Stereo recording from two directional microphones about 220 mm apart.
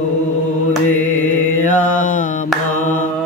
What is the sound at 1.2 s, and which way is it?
Mantra, 35° left (ahead or behind).